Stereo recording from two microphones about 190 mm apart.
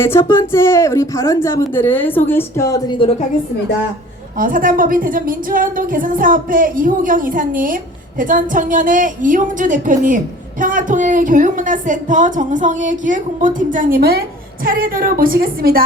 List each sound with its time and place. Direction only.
0.0 s a woman's voice: 10° left (ahead or behind)
4.4 s a woman's voice: 45° right (ahead or behind)